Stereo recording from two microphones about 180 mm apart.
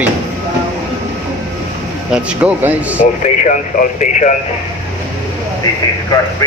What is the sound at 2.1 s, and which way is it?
Speech, 5° right (ahead or behind).